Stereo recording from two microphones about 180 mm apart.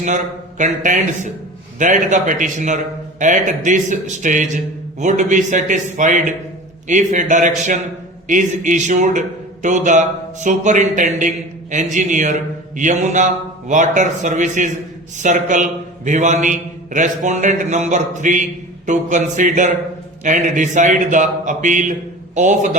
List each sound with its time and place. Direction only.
0.6 s a man's voice: 45° right (ahead or behind)